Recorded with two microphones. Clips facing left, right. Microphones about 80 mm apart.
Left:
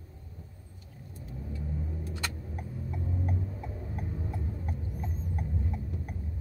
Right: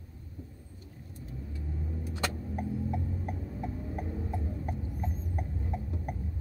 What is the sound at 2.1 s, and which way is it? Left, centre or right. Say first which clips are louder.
Vehicle: right 3 dB; right.